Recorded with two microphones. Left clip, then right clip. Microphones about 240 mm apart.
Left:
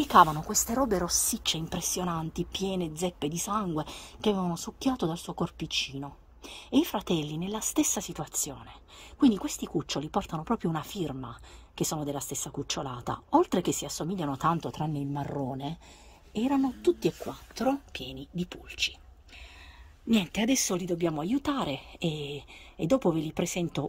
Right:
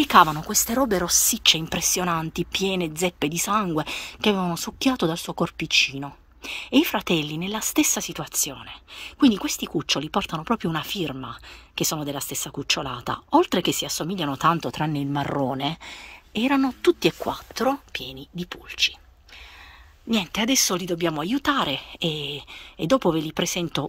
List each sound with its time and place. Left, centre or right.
0.0 s a woman's voice: right
5.6 s speech: centre
5.9 s a woman's voice: right
16.3 s speech: right
17.6 s a woman's voice: centre
20.1 s a woman's voice: centre
20.9 s speech: right
21.6 s a woman's voice: centre
22.8 s speech: right
23.4 s a woman's voice: centre